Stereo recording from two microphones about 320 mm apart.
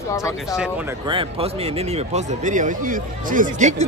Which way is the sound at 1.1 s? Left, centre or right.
Centre.